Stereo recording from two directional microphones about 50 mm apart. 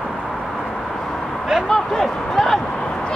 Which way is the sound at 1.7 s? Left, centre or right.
Centre.